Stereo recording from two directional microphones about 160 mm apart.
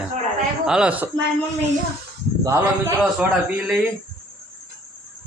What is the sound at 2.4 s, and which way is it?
Speech, 20° right (ahead or behind).